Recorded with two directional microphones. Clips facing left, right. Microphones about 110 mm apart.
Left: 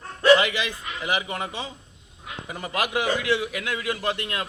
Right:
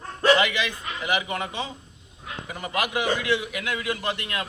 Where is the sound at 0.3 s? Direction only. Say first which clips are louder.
Even; 30° left (ahead or behind).